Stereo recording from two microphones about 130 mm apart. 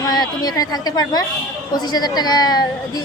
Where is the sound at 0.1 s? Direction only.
30° left (ahead or behind).